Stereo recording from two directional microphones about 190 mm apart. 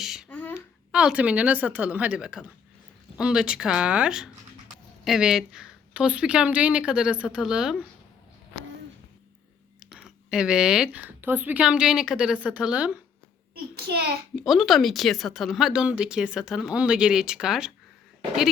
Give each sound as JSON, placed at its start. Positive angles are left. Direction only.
{"t": 0.0, "sound": "a sound", "side_deg": 0}
{"t": 0.3, "sound": "a sound", "side_deg": 10}
{"t": 0.5, "sound": "a woman's voice", "side_deg": -5}
{"t": 9.8, "sound": "speech", "side_deg": -5}
{"t": 13.7, "sound": "a child's voice", "side_deg": -55}
{"t": 14.3, "sound": "speech", "side_deg": 0}